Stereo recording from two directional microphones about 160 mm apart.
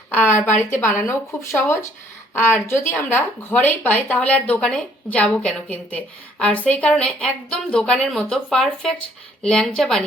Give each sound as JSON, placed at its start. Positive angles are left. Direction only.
{"t": 0.1, "sound": "a woman's voice", "side_deg": 15}